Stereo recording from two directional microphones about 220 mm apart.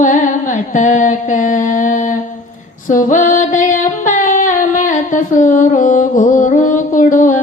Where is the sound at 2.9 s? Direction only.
35° left (ahead or behind).